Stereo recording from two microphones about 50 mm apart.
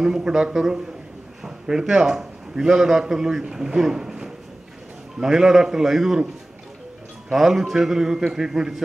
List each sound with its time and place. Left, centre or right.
0.0 s a man's voice: centre
7.2 s a man's voice: centre